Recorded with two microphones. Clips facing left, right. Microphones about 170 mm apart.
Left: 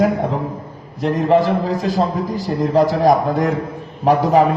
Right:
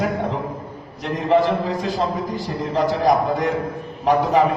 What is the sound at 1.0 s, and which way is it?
Speech, 40° left (ahead or behind).